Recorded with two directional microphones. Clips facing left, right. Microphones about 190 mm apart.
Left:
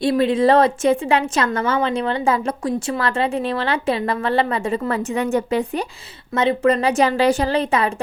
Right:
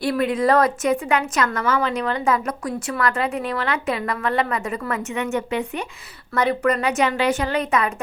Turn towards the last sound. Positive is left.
turn(degrees=30)  # may be behind; listen again after turning